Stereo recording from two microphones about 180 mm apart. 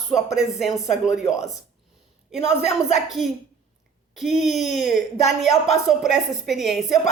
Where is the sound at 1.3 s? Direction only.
20° left (ahead or behind).